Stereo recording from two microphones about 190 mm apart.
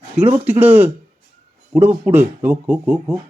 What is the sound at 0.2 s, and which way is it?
Speech, 10° right (ahead or behind).